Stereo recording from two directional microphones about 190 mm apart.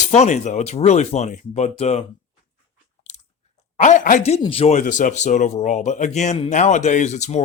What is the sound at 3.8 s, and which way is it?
Speech, 40° left (ahead or behind).